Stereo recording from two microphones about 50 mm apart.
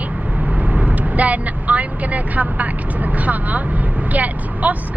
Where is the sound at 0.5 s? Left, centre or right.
Right.